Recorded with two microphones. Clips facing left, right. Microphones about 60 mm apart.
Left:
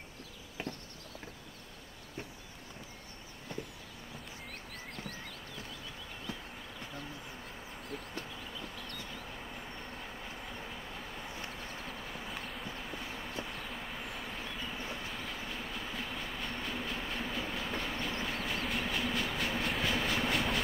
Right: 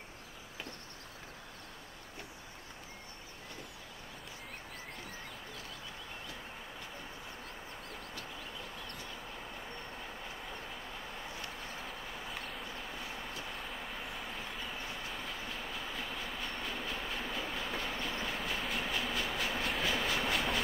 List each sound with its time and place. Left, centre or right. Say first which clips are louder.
8.5 s vehicle: left 1 dB; right
9.5 s train: even; centre
11.5 s vehicle: left 1 dB; centre
15.0 s train: left 1 dB; centre